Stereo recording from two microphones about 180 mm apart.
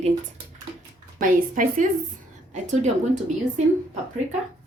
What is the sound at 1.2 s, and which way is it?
A woman's voice, 50° right (ahead or behind).